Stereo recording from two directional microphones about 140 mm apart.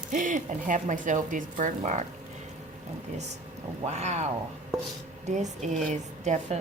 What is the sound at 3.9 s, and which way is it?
Speech, 50° right (ahead or behind).